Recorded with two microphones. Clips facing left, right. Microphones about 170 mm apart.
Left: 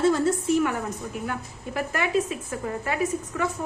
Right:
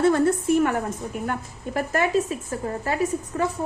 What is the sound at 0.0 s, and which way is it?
A woman's voice, 55° right (ahead or behind).